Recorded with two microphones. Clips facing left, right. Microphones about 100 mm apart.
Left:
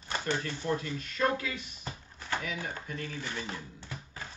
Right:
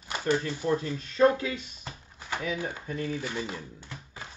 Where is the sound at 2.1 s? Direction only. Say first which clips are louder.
Even; 15° right (ahead or behind).